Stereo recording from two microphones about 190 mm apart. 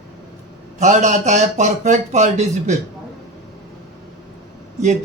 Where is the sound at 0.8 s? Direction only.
40° right (ahead or behind).